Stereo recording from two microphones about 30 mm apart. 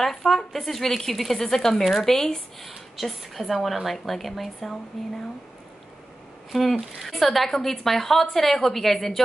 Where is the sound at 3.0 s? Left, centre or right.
Centre.